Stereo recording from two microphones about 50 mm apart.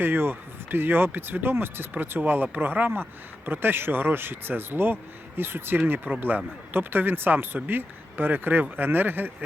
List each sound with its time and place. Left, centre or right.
0.0 s speech: right